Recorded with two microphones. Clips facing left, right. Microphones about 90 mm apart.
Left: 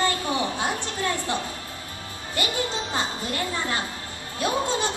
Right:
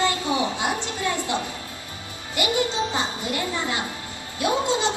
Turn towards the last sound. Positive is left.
turn(degrees=-20)  # may be behind; listen again after turning